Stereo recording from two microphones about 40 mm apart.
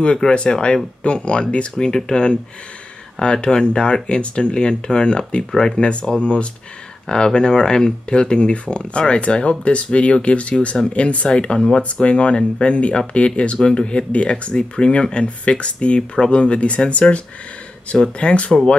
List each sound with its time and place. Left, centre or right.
0.3 s speech: left
1.8 s speech: centre
11.8 s speech: left
18.2 s speech: left